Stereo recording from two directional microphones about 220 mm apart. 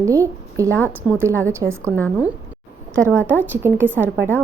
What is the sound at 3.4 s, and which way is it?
Speech, 10° right (ahead or behind).